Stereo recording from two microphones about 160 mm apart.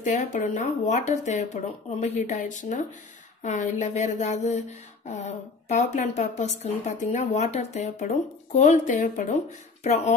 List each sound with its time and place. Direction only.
0.0 s speech: 50° left (ahead or behind)